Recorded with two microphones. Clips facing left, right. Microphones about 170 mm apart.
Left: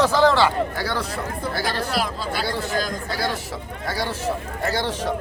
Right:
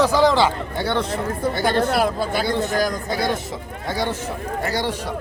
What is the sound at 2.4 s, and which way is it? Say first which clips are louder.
Speech: right 4 dB; 20° right (ahead or behind).